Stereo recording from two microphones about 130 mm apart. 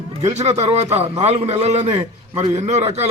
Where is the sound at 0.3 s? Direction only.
55° right (ahead or behind).